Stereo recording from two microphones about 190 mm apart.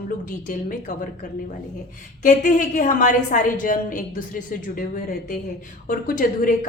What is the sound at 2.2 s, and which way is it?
A woman's voice, 45° left (ahead or behind).